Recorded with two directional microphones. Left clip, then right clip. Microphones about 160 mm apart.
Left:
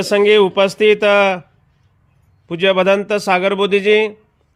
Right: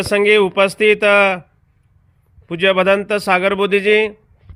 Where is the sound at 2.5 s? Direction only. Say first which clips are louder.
Even; 20° left (ahead or behind).